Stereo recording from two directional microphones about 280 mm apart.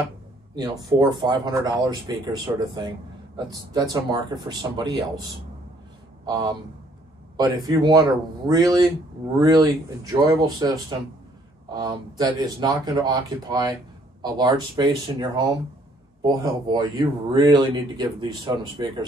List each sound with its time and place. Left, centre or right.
0.6 s speech: centre
7.3 s speech: centre